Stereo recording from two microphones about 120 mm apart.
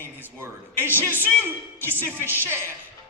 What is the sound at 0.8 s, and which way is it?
Speech, 15° left (ahead or behind).